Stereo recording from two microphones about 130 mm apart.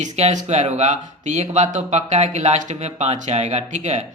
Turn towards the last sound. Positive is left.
turn(degrees=-60)  # may be behind; listen again after turning